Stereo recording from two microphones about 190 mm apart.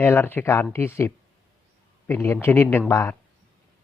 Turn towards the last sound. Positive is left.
turn(degrees=15)  # may be behind; listen again after turning